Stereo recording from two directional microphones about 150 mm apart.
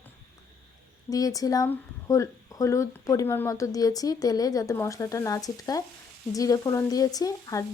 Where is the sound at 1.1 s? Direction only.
25° left (ahead or behind).